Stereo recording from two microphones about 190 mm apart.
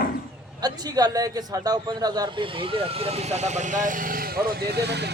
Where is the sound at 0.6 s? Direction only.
20° right (ahead or behind).